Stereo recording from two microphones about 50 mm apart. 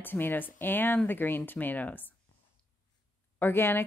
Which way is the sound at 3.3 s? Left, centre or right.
Left.